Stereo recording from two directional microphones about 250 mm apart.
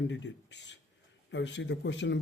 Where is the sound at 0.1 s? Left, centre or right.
Left.